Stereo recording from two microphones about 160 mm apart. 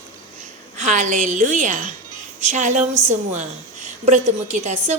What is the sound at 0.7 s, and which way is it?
A woman's voice, 50° right (ahead or behind).